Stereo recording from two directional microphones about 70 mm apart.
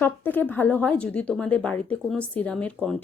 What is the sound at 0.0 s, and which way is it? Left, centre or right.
Speech, left.